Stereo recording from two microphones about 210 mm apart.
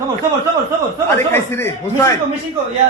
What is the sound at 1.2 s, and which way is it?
Speech, 10° left (ahead or behind).